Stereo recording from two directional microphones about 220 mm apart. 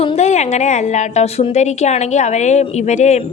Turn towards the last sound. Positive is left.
turn(degrees=30)  # may be behind; listen again after turning